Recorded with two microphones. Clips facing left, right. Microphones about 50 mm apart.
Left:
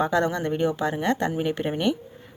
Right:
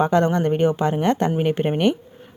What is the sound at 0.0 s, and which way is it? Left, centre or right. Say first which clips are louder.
Speech: right 5 dB; right.